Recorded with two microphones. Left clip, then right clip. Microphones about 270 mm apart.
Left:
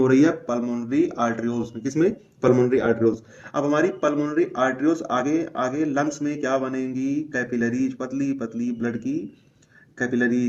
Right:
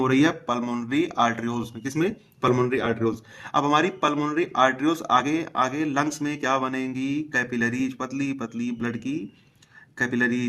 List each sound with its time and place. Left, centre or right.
0.0 s speech: right